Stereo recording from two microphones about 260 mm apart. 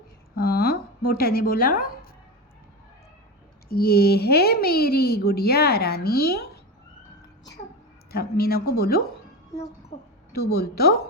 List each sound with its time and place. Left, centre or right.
0.3 s a woman's voice: left
3.7 s a woman's voice: left
8.1 s a woman's voice: left
10.3 s a woman's voice: left